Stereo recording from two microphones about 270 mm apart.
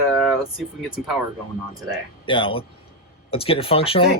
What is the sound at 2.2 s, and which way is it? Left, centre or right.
Speech, centre.